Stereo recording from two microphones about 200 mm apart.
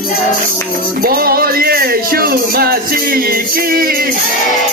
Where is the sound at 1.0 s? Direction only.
45° right (ahead or behind).